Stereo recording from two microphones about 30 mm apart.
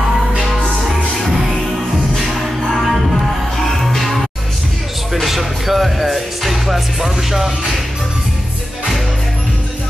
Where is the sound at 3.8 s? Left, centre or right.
Centre.